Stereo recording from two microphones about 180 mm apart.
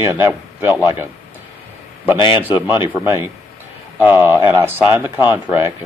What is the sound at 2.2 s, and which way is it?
Speech, 25° left (ahead or behind).